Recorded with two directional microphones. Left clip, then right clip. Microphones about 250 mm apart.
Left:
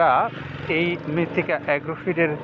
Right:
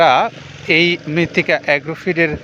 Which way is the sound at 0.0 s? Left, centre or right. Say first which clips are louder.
Right 6 dB; right.